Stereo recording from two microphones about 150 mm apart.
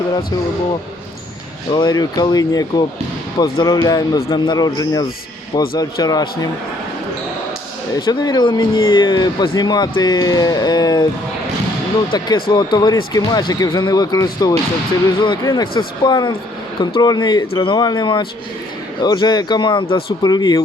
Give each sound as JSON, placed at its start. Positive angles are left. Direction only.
{"t": 1.7, "sound": "speech", "side_deg": 30}
{"t": 7.9, "sound": "speech", "side_deg": 25}
{"t": 12.1, "sound": "speech", "side_deg": 30}